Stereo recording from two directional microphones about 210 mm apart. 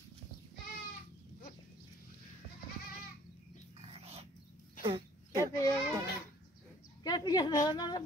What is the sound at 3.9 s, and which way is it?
Dog, 30° right (ahead or behind).